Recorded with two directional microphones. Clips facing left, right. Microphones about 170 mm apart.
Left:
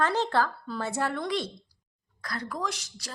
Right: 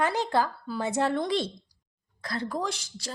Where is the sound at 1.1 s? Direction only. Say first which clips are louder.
Right 3 dB; 30° right (ahead or behind).